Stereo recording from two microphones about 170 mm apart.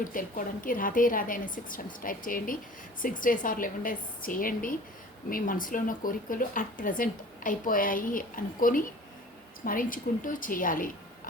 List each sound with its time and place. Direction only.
0.0 s a woman's voice: 55° left (ahead or behind)